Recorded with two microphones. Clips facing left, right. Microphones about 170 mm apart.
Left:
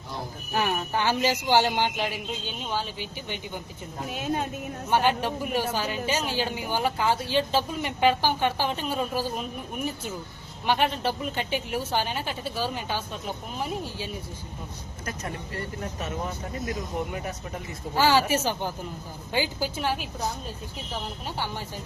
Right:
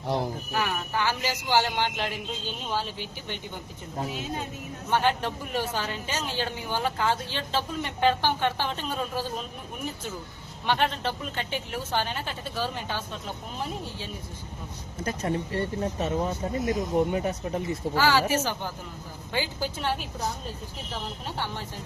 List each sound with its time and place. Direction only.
0.5 s speech: 25° left (ahead or behind)
2.6 s speech: centre (ahead or behind)
4.1 s a woman's voice: 60° left (ahead or behind)
4.9 s a man's voice: 10° left (ahead or behind)
10.7 s a man's voice: 10° left (ahead or behind)
15.0 s speech: 30° right (ahead or behind)
17.9 s a man's voice: 20° left (ahead or behind)
21.3 s speech: 5° left (ahead or behind)